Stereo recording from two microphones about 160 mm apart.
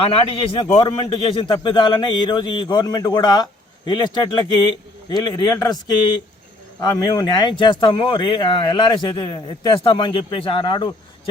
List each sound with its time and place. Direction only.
0.6 s a man's voice: 25° left (ahead or behind)